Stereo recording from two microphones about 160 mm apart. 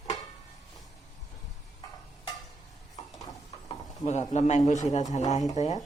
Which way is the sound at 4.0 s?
45° left (ahead or behind).